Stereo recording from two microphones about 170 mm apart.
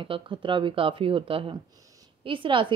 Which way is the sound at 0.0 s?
30° right (ahead or behind).